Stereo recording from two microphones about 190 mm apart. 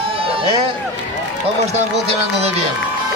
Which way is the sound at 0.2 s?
30° right (ahead or behind).